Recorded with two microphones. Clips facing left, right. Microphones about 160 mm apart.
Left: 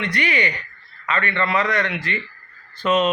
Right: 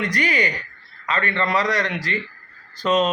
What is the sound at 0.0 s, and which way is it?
A man's voice, 40° right (ahead or behind).